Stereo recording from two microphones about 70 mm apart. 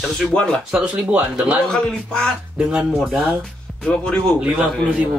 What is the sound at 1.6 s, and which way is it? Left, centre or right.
Speech, centre.